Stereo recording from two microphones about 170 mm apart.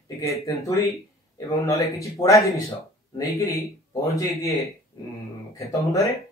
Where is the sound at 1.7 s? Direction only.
20° left (ahead or behind).